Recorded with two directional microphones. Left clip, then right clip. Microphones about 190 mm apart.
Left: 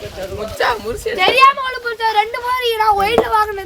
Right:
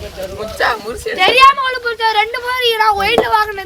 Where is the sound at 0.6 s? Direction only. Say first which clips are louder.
Right 1 dB; 90° left.